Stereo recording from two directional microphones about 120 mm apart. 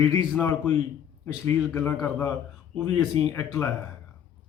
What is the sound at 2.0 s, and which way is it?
Speech, 20° left (ahead or behind).